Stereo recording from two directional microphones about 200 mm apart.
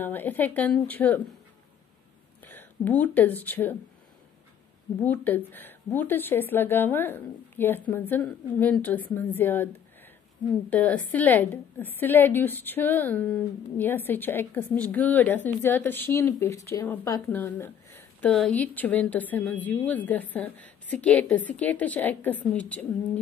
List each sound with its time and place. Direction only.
0.0 s a woman's voice: 10° left (ahead or behind)
2.4 s speech: 10° left (ahead or behind)
5.0 s a woman's voice: 10° left (ahead or behind)
10.7 s a woman's voice: 10° left (ahead or behind)